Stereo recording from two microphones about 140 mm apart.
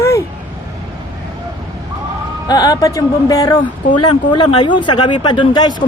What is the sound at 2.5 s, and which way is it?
Speech, 25° left (ahead or behind).